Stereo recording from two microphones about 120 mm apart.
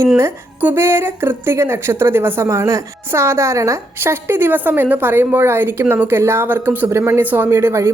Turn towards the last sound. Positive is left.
turn(degrees=-20)  # may be behind; listen again after turning